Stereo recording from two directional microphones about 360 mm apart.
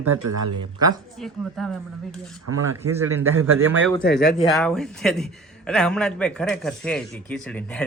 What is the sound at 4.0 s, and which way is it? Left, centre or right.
Speech, left.